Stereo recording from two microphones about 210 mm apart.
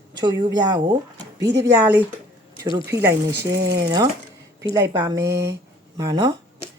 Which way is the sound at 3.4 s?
50° right (ahead or behind).